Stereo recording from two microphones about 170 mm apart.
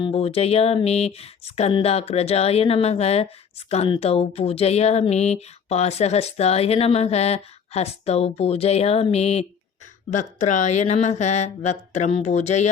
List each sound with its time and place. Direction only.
0.0 s speech: 35° left (ahead or behind)